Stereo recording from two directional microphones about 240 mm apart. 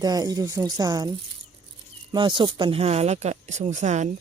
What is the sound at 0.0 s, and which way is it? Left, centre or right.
Speech, centre.